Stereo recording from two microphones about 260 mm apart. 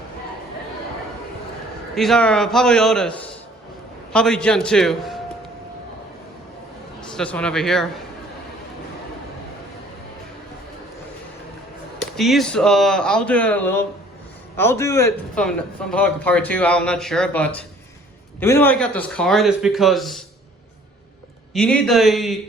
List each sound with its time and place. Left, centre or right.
2.0 s a man's voice: centre
7.0 s a man's voice: centre
12.1 s a man's voice: centre
21.5 s a man's voice: centre